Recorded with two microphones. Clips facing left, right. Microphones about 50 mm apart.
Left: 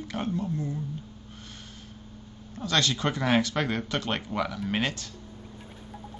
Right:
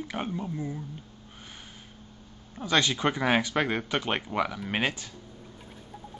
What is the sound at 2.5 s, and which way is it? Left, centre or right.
Speech, centre.